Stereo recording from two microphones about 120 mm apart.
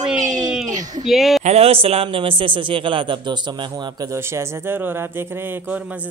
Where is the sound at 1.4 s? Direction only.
65° right (ahead or behind).